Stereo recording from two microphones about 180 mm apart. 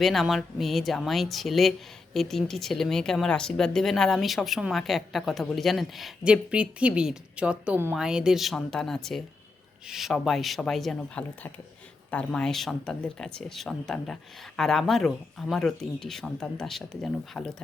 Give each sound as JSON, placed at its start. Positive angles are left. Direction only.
{"t": 0.0, "sound": "speech", "side_deg": 0}